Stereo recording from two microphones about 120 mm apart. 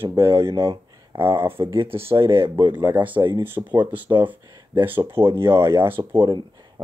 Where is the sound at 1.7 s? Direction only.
50° right (ahead or behind).